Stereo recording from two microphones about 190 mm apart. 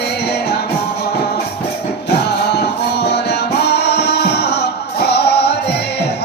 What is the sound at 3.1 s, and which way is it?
Music, 60° left (ahead or behind).